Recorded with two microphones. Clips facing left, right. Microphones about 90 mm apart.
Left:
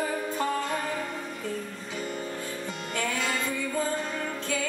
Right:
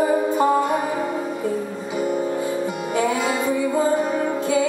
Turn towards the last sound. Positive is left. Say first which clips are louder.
# right 11 dB
turn(degrees=-15)  # may be behind; listen again after turning